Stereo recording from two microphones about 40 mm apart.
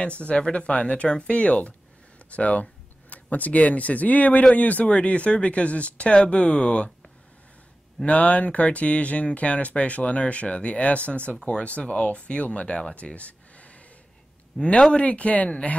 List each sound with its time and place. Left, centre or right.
0.2 s speech: left
8.0 s speech: left
14.5 s speech: centre
15.0 s speech: left